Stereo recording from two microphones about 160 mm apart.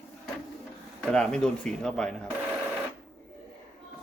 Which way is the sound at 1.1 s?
5° left (ahead or behind).